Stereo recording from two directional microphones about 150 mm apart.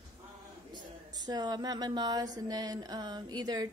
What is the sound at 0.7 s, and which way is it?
Speech, 25° right (ahead or behind).